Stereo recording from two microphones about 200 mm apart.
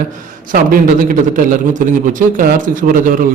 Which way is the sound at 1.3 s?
40° right (ahead or behind).